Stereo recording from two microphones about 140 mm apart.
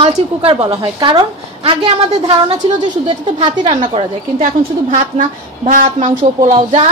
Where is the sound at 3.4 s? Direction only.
35° right (ahead or behind).